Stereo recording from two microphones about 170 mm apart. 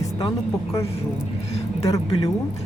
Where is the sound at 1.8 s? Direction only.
20° left (ahead or behind).